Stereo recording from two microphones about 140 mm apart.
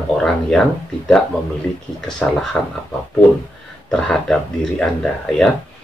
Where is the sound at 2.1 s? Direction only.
5° left (ahead or behind).